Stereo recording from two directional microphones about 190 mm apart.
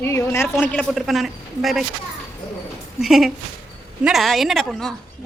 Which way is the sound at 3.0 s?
Centre (ahead or behind).